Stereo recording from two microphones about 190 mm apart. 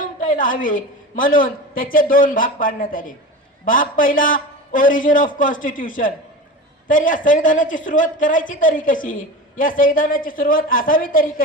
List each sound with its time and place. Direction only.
0.0 s a man's voice: 45° left (ahead or behind)